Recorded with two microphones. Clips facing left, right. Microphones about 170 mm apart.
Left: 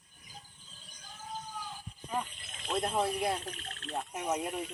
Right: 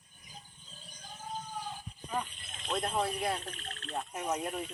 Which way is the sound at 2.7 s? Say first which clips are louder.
Left 1 dB; 10° left (ahead or behind).